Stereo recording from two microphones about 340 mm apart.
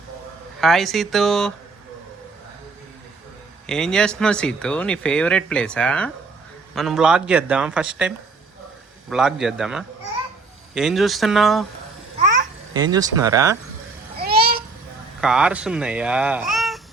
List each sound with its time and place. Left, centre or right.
0.6 s speech: centre
3.7 s speech: centre
12.7 s speech: centre
14.2 s babbling: right
15.2 s speech: centre